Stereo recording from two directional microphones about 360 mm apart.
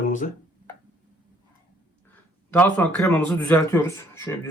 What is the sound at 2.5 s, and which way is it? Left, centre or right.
Speech, centre.